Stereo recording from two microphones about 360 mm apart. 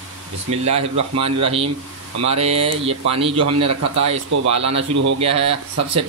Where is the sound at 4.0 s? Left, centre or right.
Centre.